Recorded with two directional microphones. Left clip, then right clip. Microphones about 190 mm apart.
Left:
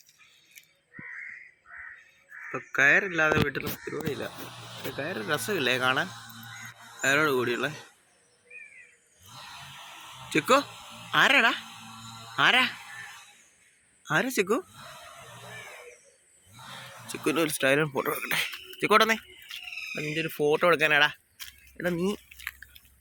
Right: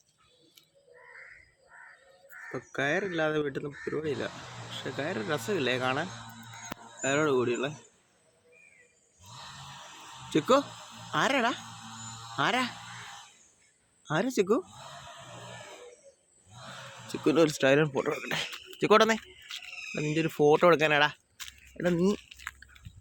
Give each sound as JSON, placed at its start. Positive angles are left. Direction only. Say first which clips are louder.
{"t": 2.7, "sound": "speech", "louder": "left 8 dB", "side_deg": -10}
{"t": 4.9, "sound": "speech", "louder": "left 2 dB", "side_deg": -5}
{"t": 10.2, "sound": "speech", "louder": "left 2 dB", "side_deg": -10}
{"t": 14.0, "sound": "speech", "louder": "left 2 dB", "side_deg": -10}
{"t": 17.1, "sound": "speech", "louder": "right 3 dB", "side_deg": -30}
{"t": 17.9, "sound": "speech", "louder": "left 2 dB", "side_deg": -5}
{"t": 18.8, "sound": "speech", "louder": "left 1 dB", "side_deg": -20}
{"t": 20.0, "sound": "speech", "louder": "right 2 dB", "side_deg": -35}
{"t": 21.8, "sound": "drip", "louder": "right 1 dB", "side_deg": -25}